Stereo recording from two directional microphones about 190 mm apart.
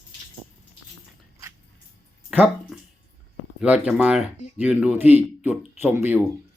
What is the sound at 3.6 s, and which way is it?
Speech, 5° right (ahead or behind).